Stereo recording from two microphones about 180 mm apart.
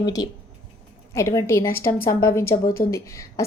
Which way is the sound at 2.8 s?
50° left (ahead or behind).